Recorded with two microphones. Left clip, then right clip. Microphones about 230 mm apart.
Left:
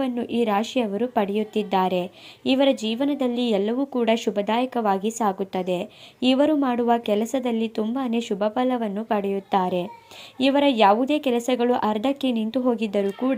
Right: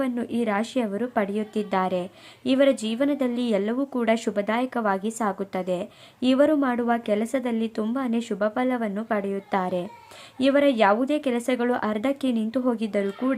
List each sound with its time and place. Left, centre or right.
0.0 s a woman's voice: centre